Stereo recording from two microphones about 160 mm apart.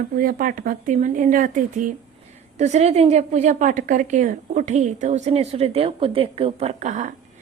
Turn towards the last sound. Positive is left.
turn(degrees=-50)  # may be behind; listen again after turning